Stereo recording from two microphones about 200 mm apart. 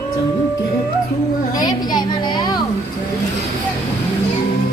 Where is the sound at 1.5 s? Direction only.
20° left (ahead or behind).